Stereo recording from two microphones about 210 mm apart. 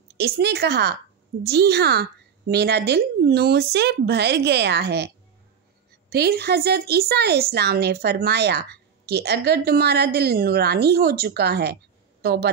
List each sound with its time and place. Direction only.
0.2 s speech: 50° right (ahead or behind)